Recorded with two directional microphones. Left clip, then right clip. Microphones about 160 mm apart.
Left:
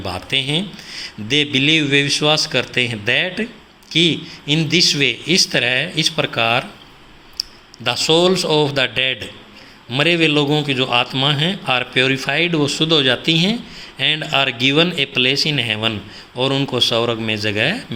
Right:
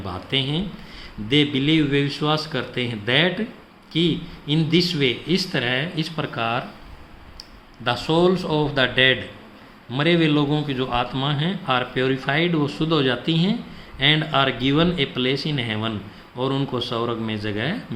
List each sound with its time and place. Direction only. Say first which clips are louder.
0.0 s a man's voice: left 4 dB; 20° left (ahead or behind)
7.9 s a man's voice: left 5 dB; 20° left (ahead or behind)